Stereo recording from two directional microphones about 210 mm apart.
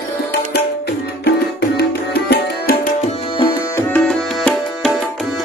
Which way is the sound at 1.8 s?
50° left (ahead or behind).